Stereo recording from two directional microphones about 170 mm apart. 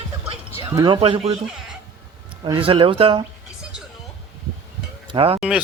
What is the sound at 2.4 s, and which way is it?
Speech, 30° right (ahead or behind).